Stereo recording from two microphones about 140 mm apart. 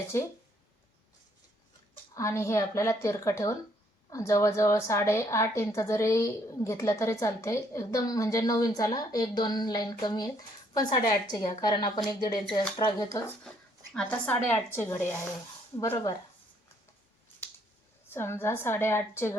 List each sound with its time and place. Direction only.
0.1 s a woman's voice: 20° left (ahead or behind)
2.1 s a woman's voice: 20° left (ahead or behind)
13.9 s a woman's voice: 10° left (ahead or behind)
18.1 s a woman's voice: 15° left (ahead or behind)